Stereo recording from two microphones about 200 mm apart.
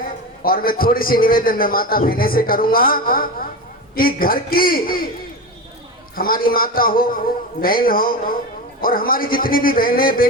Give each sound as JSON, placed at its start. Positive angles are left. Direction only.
{"t": 0.0, "sound": "a man's voice", "side_deg": 45}
{"t": 6.1, "sound": "a man's voice", "side_deg": 45}